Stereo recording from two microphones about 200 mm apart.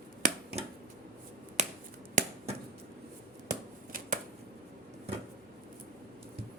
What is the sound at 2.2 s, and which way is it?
Finger snapping, 40° right (ahead or behind).